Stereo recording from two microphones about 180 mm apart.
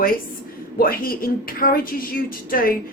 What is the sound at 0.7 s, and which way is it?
A woman's voice, 55° left (ahead or behind).